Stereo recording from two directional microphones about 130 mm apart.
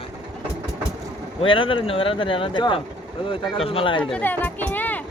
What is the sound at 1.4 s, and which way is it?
Speech, 40° left (ahead or behind).